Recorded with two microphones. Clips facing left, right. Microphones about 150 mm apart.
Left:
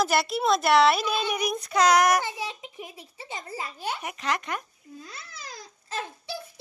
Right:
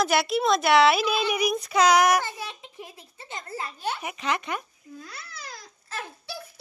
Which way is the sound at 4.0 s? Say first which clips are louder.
Right 1 dB; centre (ahead or behind).